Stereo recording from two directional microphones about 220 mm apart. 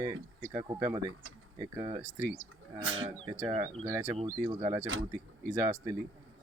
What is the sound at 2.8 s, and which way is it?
Speech, 65° right (ahead or behind).